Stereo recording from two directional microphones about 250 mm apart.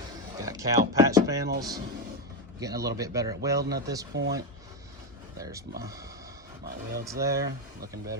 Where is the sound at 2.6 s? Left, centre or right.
Centre.